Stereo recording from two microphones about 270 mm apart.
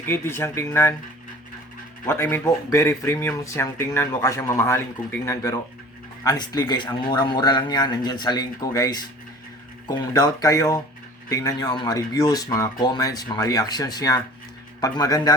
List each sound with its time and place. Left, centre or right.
0.0 s speech: centre
2.0 s speech: centre